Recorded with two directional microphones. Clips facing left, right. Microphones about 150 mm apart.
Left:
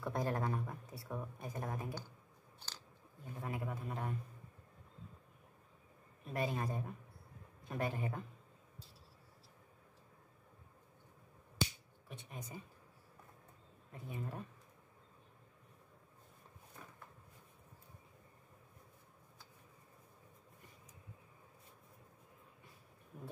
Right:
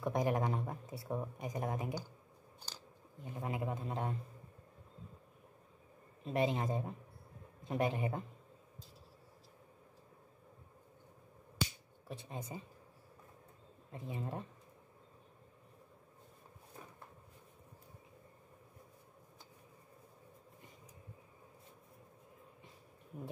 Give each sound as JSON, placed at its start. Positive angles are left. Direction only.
{"t": 0.0, "sound": "speech", "side_deg": -15}
{"t": 3.3, "sound": "speech", "side_deg": -20}
{"t": 6.2, "sound": "speech", "side_deg": -20}
{"t": 12.3, "sound": "speech", "side_deg": -25}
{"t": 13.9, "sound": "speech", "side_deg": -25}